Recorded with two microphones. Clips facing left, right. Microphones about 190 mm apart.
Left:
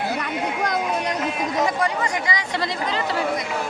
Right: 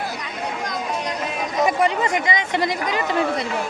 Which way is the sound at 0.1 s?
60° left (ahead or behind).